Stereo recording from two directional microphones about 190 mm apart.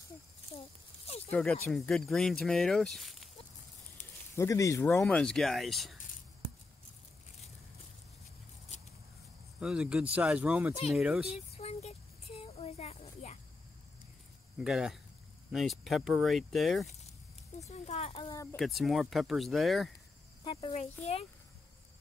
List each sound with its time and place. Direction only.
1.0 s snake: 35° left (ahead or behind)
1.3 s speech: 5° left (ahead or behind)
4.4 s speech: 15° left (ahead or behind); by 5.9 s centre (ahead or behind)
9.6 s speech: 5° right (ahead or behind)
11.5 s a sound: 35° left (ahead or behind)
14.6 s speech: centre (ahead or behind)
17.6 s a sound: 35° left (ahead or behind)
18.3 s speech: 15° left (ahead or behind)
18.6 s speech: centre (ahead or behind)
20.4 s speech: 30° left (ahead or behind)